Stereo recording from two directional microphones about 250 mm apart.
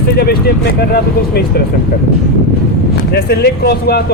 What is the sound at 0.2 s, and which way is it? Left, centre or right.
Speech, left.